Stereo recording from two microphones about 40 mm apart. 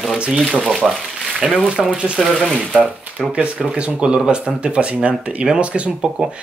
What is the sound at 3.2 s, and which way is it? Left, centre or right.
Speech, right.